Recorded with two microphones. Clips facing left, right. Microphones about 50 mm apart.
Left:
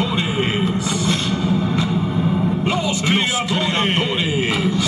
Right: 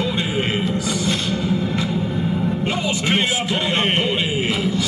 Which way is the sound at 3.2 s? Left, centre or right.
Right.